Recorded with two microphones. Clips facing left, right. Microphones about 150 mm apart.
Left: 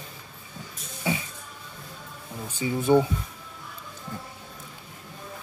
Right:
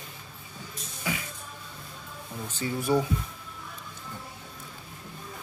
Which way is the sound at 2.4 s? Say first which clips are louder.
Left 5 dB; 15° left (ahead or behind).